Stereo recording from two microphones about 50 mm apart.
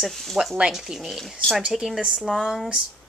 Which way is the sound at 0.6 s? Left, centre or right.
Centre.